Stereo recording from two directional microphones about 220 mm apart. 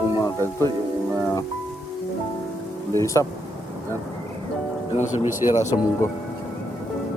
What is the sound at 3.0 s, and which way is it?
Speech, 15° left (ahead or behind).